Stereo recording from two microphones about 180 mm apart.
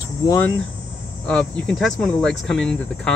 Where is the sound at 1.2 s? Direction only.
5° left (ahead or behind).